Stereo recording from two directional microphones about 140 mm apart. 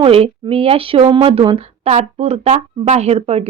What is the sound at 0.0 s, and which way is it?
Speech, 40° right (ahead or behind).